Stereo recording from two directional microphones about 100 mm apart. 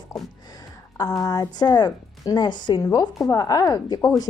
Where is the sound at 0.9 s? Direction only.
40° left (ahead or behind).